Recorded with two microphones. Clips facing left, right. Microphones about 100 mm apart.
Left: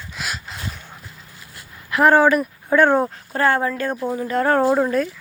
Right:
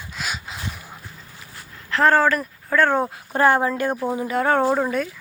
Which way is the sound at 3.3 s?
15° right (ahead or behind).